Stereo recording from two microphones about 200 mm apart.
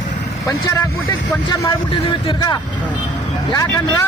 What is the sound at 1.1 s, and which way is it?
Speech, 15° left (ahead or behind).